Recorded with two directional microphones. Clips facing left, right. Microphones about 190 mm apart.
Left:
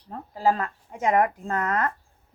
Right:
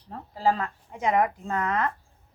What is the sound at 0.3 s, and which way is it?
Speech, 50° left (ahead or behind).